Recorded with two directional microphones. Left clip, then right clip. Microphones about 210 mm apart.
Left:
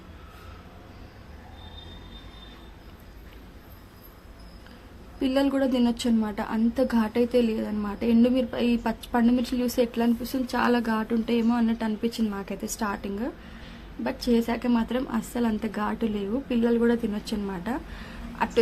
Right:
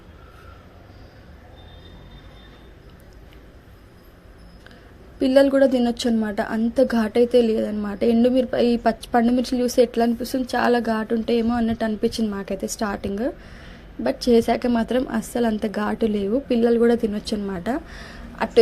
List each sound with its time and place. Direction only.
5.2 s a woman's voice: 20° right (ahead or behind)